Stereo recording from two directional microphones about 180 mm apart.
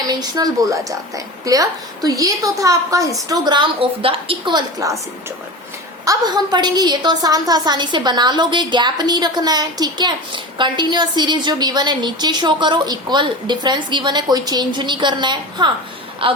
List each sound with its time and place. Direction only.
0.1 s a woman's voice: 20° right (ahead or behind)
6.1 s a woman's voice: 25° right (ahead or behind)